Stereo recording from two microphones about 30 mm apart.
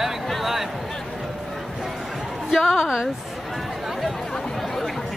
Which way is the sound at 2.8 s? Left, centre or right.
Right.